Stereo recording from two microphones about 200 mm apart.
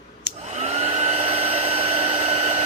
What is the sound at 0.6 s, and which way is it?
Hair dryer, 35° right (ahead or behind).